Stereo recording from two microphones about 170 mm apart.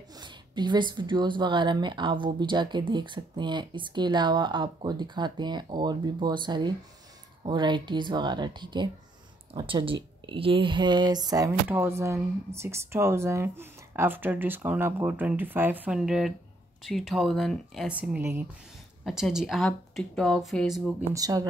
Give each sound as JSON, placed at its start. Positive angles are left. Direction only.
{"t": 0.1, "sound": "a woman's voice", "side_deg": -25}
{"t": 10.2, "sound": "a sound", "side_deg": -30}
{"t": 16.8, "sound": "speech", "side_deg": 0}
{"t": 21.1, "sound": "a woman's voice", "side_deg": -20}